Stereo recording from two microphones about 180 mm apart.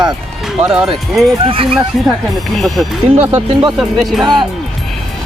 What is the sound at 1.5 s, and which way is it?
Speech, 30° right (ahead or behind).